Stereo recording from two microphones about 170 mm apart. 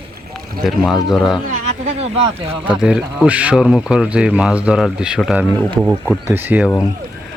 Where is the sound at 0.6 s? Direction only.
Centre (ahead or behind).